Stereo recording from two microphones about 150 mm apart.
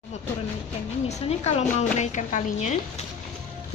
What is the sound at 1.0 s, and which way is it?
A woman's voice, 50° left (ahead or behind).